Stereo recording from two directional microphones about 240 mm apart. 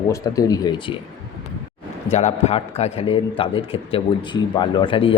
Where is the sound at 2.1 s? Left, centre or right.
Left.